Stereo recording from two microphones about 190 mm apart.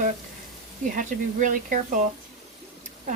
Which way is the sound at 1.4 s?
45° right (ahead or behind).